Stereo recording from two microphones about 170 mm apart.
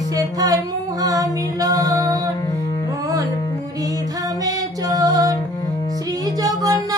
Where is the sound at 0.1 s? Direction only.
20° right (ahead or behind).